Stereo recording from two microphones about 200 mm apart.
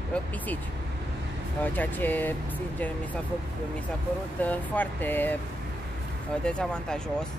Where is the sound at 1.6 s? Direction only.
10° left (ahead or behind).